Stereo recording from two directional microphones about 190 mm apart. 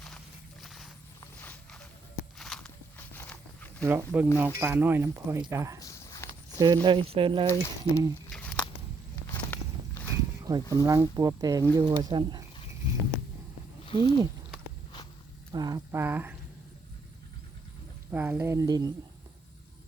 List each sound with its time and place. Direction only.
0.6 s a sound: centre (ahead or behind)
1.2 s a sound: 10° left (ahead or behind)
2.4 s walk: 5° left (ahead or behind)
3.8 s speech: 10° right (ahead or behind)
5.8 s walk: 15° left (ahead or behind)
6.8 s speech: 30° right (ahead or behind)
7.4 s speech: 15° left (ahead or behind)
8.3 s a sound: 5° left (ahead or behind)
9.2 s walk: 15° left (ahead or behind)
10.4 s speech: 20° right (ahead or behind)
13.8 s speech: 25° left (ahead or behind)
15.5 s speech: 20° right (ahead or behind)
18.1 s speech: 10° right (ahead or behind)